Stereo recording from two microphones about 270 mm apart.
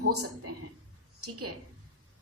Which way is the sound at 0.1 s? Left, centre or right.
Right.